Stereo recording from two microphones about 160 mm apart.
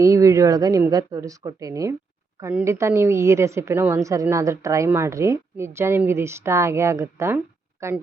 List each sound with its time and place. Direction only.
0.0 s a woman's voice: 20° right (ahead or behind)